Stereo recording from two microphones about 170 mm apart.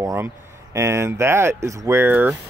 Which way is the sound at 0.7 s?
15° right (ahead or behind).